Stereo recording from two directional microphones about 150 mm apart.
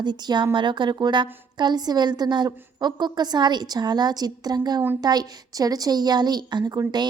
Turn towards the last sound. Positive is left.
turn(degrees=-25)  # may be behind; listen again after turning